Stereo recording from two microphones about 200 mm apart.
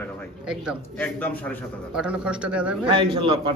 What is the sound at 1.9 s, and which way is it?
Speech, 5° right (ahead or behind).